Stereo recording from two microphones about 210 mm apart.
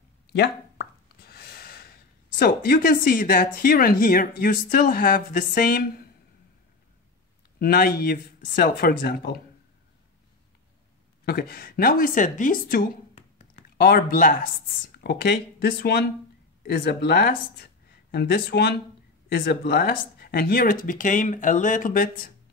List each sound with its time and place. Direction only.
0.3 s plop: 50° left (ahead or behind)
1.3 s speech: 50° left (ahead or behind)
7.5 s speech: 45° left (ahead or behind)
11.2 s speech: 45° left (ahead or behind)
13.1 s a sound: 30° left (ahead or behind)
13.7 s speech: 45° left (ahead or behind)